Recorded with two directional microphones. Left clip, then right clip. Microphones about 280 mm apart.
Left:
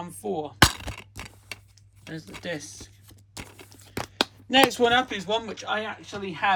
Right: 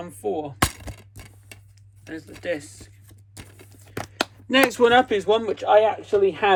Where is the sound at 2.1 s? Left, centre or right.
Centre.